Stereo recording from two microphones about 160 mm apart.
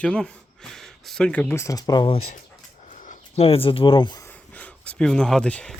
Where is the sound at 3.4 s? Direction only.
35° left (ahead or behind).